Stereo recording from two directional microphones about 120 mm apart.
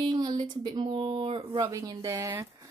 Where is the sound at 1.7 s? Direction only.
25° right (ahead or behind).